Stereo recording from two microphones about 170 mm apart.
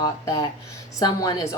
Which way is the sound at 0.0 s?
20° left (ahead or behind).